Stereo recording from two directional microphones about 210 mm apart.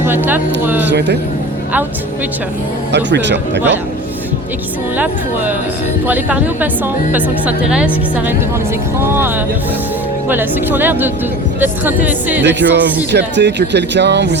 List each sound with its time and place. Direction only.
0.0 s a woman's voice: 10° right (ahead or behind)
0.9 s speech: 55° right (ahead or behind)
2.9 s speech: 55° right (ahead or behind)
6.1 s a woman's voice: 5° right (ahead or behind)
12.4 s speech: 55° right (ahead or behind)